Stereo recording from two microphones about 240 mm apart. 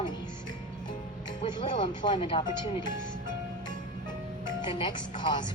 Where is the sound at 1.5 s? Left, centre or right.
Centre.